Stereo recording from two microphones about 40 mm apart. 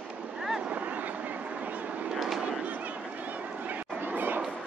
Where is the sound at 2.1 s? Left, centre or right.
Centre.